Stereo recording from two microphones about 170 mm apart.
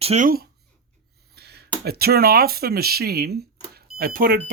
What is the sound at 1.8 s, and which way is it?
Speech, 65° right (ahead or behind).